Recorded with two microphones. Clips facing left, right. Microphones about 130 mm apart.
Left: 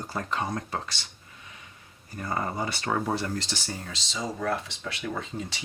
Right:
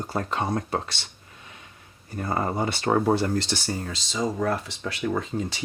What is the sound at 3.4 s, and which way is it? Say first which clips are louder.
Speech: right 6 dB; 45° right (ahead or behind).